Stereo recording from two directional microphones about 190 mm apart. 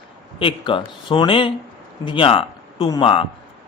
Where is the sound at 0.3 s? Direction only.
25° left (ahead or behind).